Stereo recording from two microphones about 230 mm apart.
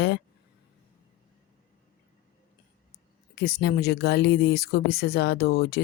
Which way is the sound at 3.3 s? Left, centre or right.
Left.